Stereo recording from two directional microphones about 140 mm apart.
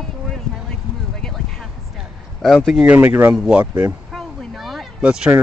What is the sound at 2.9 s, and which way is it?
Speech, 15° right (ahead or behind).